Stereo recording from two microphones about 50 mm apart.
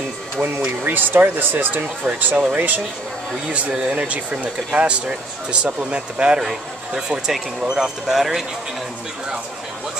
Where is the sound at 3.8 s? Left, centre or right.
Right; by 8.4 s centre.